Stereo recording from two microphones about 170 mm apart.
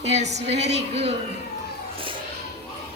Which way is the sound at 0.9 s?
35° right (ahead or behind).